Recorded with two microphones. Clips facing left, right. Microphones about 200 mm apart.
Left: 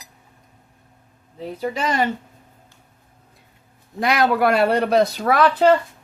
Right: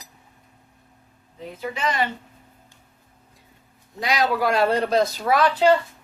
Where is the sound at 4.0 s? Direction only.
55° left (ahead or behind).